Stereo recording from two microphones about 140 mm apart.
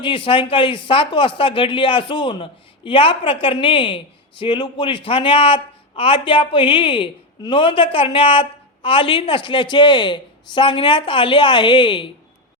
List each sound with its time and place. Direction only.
0.0 s speech: 40° left (ahead or behind)